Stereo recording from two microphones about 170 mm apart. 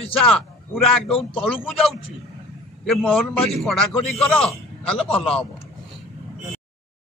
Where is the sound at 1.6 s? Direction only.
Centre (ahead or behind).